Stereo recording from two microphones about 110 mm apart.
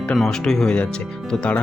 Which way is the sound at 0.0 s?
5° left (ahead or behind).